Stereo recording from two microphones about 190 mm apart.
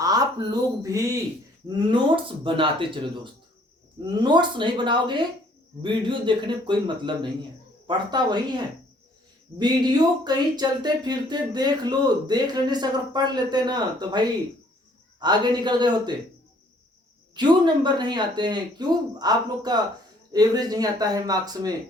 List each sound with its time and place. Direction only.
0.0 s speech: 20° right (ahead or behind)
4.2 s speech: 25° right (ahead or behind)
17.3 s speech: 25° right (ahead or behind)